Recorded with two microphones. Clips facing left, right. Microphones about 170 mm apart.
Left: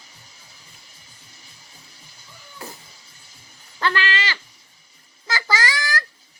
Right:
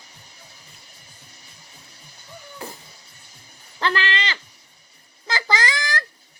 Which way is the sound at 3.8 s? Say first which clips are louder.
Even; 25° right (ahead or behind).